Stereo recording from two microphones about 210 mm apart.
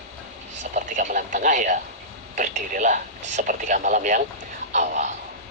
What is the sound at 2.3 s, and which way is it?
Speech, 35° right (ahead or behind).